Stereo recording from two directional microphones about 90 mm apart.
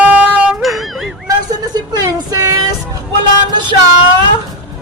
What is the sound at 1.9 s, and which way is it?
Child singing, 40° right (ahead or behind).